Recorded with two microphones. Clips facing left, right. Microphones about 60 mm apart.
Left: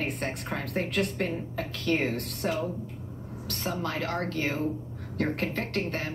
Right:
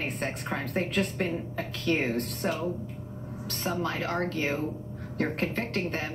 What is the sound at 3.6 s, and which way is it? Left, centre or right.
A woman's voice, centre.